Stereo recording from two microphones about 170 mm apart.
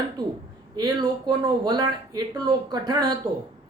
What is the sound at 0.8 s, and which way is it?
Speech, 25° right (ahead or behind).